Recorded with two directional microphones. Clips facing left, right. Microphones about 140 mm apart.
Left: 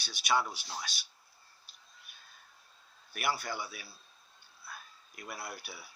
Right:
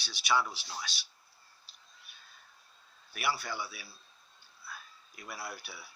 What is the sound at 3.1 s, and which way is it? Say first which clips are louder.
Speech: even; 45° left (ahead or behind).